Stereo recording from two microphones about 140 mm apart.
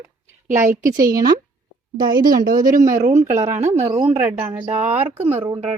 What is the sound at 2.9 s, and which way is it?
Speech, 55° right (ahead or behind).